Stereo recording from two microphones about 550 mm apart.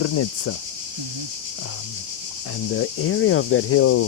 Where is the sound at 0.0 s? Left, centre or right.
Left.